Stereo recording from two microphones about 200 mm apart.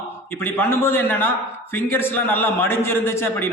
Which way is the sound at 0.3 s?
10° left (ahead or behind).